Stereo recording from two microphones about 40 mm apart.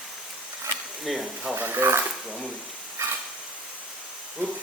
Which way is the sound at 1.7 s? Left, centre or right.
Right.